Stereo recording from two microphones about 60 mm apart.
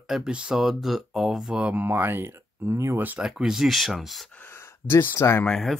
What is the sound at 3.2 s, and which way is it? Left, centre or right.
Speech, centre.